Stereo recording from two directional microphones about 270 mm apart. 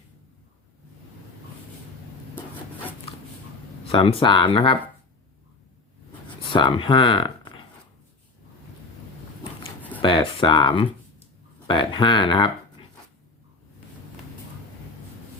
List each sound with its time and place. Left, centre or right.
3.1 s a sound: left
3.8 s speech: centre
6.5 s speech: centre
10.0 s speech: centre